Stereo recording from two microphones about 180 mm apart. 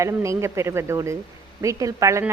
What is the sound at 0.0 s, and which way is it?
A woman's voice, 15° right (ahead or behind).